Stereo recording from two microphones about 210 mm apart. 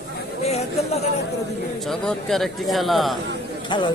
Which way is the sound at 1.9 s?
Centre (ahead or behind).